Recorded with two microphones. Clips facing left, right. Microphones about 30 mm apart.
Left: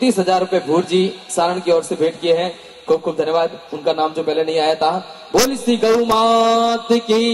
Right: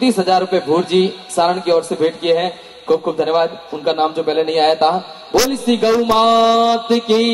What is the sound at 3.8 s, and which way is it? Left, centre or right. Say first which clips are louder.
A man's voice: right 1 dB; right.